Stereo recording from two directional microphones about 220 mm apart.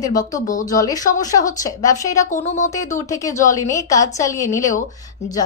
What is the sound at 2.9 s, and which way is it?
A woman's voice, 15° left (ahead or behind).